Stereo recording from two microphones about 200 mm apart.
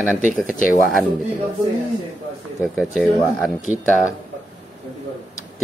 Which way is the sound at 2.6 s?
Centre (ahead or behind).